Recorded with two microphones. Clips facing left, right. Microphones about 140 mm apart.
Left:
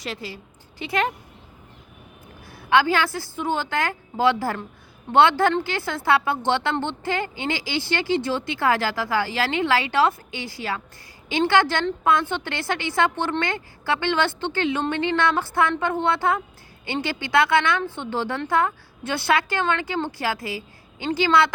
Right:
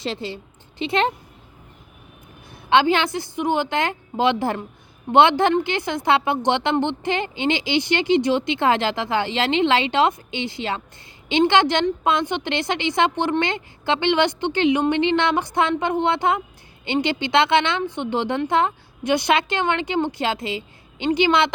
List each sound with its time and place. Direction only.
0.0 s speech: 25° right (ahead or behind)
2.5 s speech: 20° right (ahead or behind)